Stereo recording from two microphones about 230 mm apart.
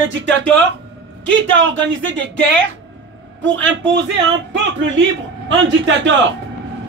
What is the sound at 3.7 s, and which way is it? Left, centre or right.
Speech, right.